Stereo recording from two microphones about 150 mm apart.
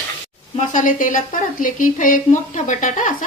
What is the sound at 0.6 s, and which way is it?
Speech, 60° left (ahead or behind).